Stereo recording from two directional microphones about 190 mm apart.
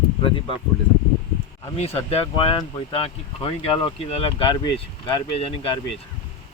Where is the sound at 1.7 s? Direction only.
35° left (ahead or behind).